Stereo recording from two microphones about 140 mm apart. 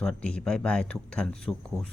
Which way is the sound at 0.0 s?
5° left (ahead or behind).